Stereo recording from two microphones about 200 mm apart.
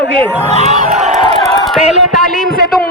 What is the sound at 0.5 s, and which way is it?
Crowd, 35° right (ahead or behind).